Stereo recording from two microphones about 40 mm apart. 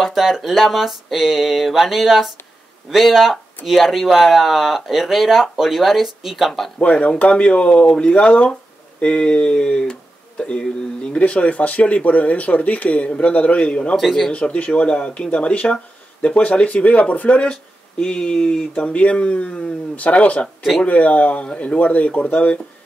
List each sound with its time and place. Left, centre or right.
0.0 s speech: centre
6.8 s speech: left
11.1 s speech: left
13.9 s speech: centre
14.3 s speech: left
17.5 s speech: left
18.8 s speech: left